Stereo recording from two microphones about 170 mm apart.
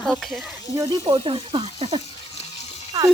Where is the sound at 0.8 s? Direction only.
20° right (ahead or behind); by 2.0 s 40° right (ahead or behind).